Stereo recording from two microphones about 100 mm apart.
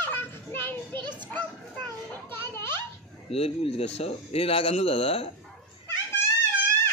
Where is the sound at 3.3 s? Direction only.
75° left (ahead or behind).